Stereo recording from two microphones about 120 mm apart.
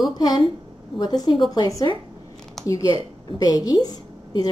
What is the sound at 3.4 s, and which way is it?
Speech, 30° left (ahead or behind).